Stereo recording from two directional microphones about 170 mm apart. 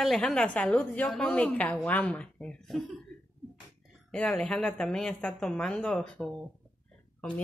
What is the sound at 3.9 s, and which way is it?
A woman's voice, 5° left (ahead or behind).